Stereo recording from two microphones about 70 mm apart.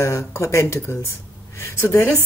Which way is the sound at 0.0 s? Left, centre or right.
Left.